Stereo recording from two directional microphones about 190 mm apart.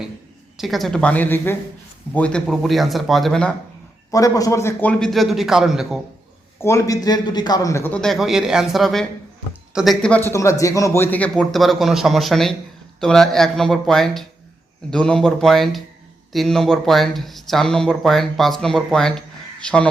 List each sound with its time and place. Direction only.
0.5 s speech: centre (ahead or behind)
4.1 s speech: 20° left (ahead or behind); by 6.0 s centre (ahead or behind)
6.6 s a man's voice: 15° left (ahead or behind)